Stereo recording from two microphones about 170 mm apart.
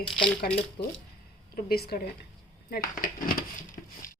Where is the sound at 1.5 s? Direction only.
65° left (ahead or behind).